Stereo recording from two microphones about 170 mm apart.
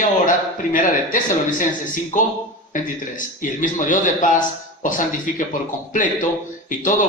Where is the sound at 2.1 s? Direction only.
50° left (ahead or behind).